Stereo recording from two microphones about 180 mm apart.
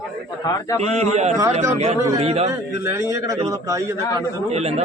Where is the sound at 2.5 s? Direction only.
15° right (ahead or behind).